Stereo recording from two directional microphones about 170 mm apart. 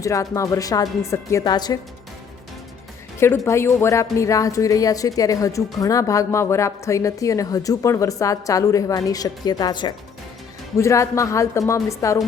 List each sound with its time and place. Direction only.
0.0 s a woman's voice: 20° left (ahead or behind)
3.2 s a woman's voice: 15° left (ahead or behind)